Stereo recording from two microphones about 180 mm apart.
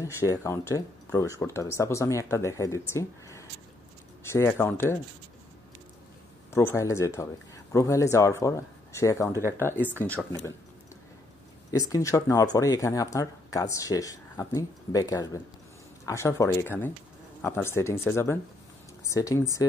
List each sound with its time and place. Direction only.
0.0 s speech: 15° left (ahead or behind)
6.5 s speech: 15° left (ahead or behind)
9.3 s speech: 15° right (ahead or behind)
9.6 s speech: 10° left (ahead or behind)
11.7 s speech: 20° left (ahead or behind)